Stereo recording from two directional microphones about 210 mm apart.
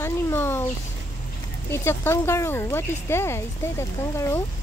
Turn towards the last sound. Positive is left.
turn(degrees=15)  # may be behind; listen again after turning